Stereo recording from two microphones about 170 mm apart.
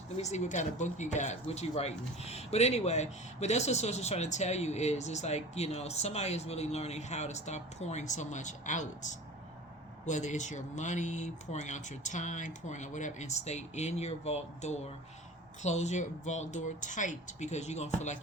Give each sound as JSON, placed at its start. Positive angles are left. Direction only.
{"t": 0.2, "sound": "speech", "side_deg": 40}